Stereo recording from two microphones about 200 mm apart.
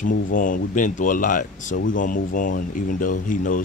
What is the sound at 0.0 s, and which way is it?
Speech, 45° left (ahead or behind).